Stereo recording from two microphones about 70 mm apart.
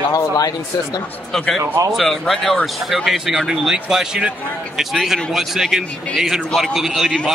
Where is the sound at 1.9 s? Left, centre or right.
Centre.